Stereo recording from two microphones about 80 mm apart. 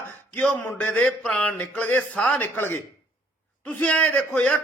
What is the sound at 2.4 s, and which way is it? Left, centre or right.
A man's voice, left.